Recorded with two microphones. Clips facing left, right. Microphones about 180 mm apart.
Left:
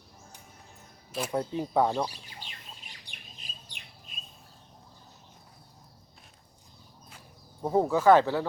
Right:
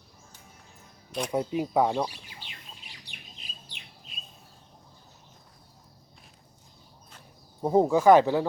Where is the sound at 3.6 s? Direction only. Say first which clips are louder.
Right 1 dB; 50° left (ahead or behind).